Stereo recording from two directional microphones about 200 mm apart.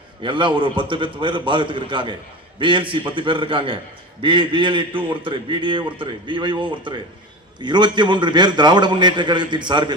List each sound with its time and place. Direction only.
0.2 s a man's voice: 25° right (ahead or behind)